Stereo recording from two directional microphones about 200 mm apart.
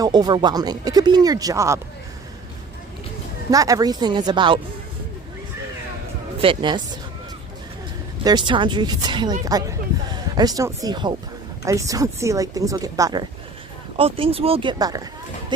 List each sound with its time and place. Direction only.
0.0 s speech: 20° right (ahead or behind)
3.5 s speech: 15° right (ahead or behind)
6.4 s speech: 25° right (ahead or behind)
8.2 s speech: 20° right (ahead or behind)